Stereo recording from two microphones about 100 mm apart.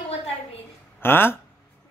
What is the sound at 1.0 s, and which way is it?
Speech, 20° left (ahead or behind).